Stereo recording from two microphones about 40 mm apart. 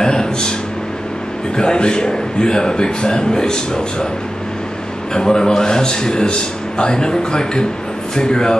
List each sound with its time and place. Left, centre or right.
0.0 s a man's voice: centre
1.6 s a man's voice: left
5.1 s a man's voice: centre